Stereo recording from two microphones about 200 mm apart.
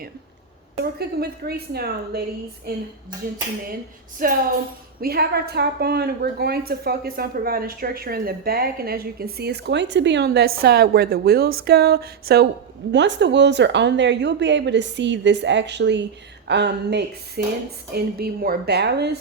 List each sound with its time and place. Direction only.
0.9 s a woman's voice: 50° right (ahead or behind)
4.2 s a woman's voice: 45° right (ahead or behind)
12.9 s a woman's voice: 60° right (ahead or behind)